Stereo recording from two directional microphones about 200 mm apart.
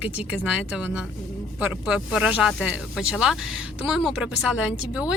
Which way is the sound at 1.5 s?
5° right (ahead or behind).